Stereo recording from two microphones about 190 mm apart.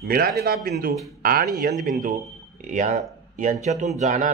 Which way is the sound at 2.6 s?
40° right (ahead or behind).